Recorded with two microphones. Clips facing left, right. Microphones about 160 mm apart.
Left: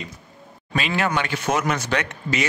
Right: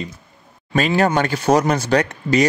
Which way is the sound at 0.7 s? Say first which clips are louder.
Right 6 dB; 40° right (ahead or behind).